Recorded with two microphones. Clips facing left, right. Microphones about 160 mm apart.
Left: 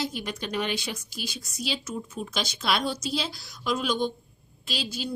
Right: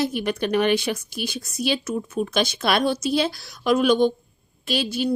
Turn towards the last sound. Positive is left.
turn(degrees=-65)  # may be behind; listen again after turning